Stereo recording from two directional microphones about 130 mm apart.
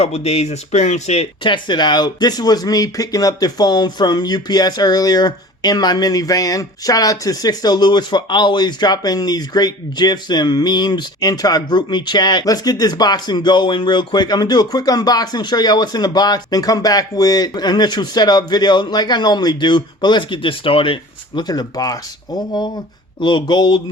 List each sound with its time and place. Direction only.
0.0 s speech: 50° left (ahead or behind)
1.5 s speech: 35° left (ahead or behind)
23.2 s speech: 35° left (ahead or behind)